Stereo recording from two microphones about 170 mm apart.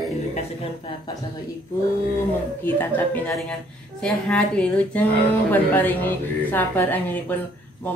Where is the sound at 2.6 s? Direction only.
10° left (ahead or behind).